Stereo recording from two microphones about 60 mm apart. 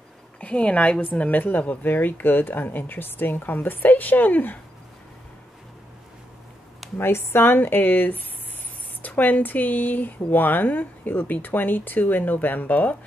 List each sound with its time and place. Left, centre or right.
0.4 s a woman's voice: left
7.0 s a woman's voice: left